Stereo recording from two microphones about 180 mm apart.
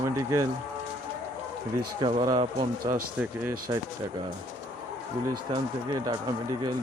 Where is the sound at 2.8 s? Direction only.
55° right (ahead or behind).